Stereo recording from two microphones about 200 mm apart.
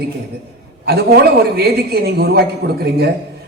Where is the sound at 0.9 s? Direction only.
50° right (ahead or behind).